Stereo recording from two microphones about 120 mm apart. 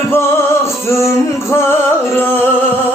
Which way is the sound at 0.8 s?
25° left (ahead or behind).